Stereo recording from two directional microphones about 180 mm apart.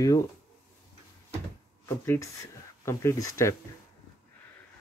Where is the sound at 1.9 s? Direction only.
15° left (ahead or behind).